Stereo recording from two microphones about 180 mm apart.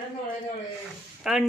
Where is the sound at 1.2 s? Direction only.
5° right (ahead or behind).